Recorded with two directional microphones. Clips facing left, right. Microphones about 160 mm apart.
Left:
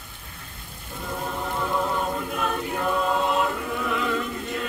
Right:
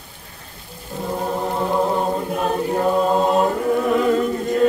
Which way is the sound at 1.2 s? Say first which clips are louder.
Right 6 dB; 35° right (ahead or behind).